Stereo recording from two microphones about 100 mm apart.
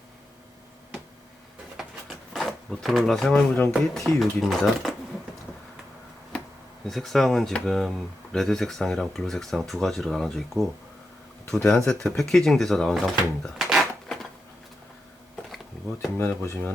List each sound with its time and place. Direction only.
1.7 s a sound: centre (ahead or behind)
3.7 s speech: 5° left (ahead or behind)
6.8 s speech: 5° left (ahead or behind)
16.1 s speech: 25° left (ahead or behind)